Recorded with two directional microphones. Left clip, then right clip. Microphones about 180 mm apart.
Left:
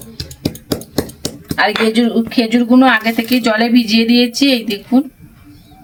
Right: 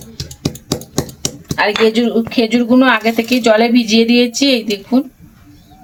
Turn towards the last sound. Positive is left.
turn(degrees=-20)  # may be behind; listen again after turning